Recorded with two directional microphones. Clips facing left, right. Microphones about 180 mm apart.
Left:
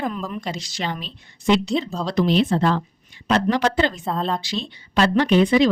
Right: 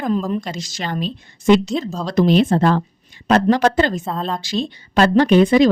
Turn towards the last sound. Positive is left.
turn(degrees=-45)  # may be behind; listen again after turning